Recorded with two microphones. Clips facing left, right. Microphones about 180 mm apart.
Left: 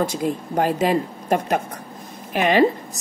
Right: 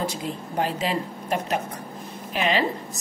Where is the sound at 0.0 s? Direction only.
50° left (ahead or behind).